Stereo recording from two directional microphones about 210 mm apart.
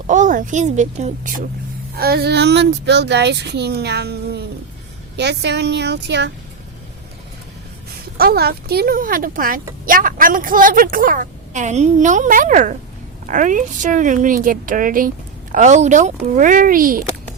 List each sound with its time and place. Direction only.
0.1 s a woman's voice: 40° right (ahead or behind)
2.0 s speech: 50° right (ahead or behind)
8.2 s a woman's voice: 50° right (ahead or behind)